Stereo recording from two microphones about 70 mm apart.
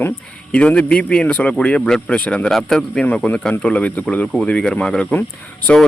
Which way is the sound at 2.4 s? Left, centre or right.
Centre.